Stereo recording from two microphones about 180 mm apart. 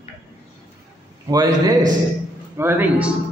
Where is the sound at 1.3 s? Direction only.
20° right (ahead or behind).